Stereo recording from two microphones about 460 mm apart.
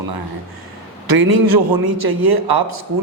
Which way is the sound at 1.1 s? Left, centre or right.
Right.